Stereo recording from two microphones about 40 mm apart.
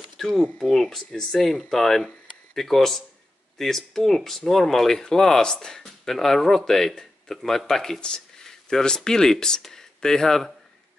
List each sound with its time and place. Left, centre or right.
0.2 s speech: centre